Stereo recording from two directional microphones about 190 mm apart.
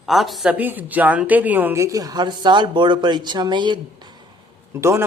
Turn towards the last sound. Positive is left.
turn(degrees=-15)  # may be behind; listen again after turning